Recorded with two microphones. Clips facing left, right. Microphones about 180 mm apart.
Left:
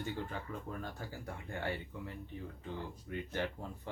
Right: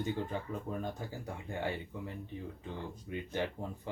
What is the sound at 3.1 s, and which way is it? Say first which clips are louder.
Speech: right 2 dB; 15° right (ahead or behind).